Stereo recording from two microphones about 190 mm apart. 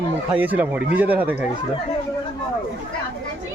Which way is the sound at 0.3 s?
10° right (ahead or behind).